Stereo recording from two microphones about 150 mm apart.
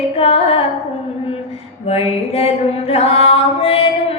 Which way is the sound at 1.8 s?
40° left (ahead or behind).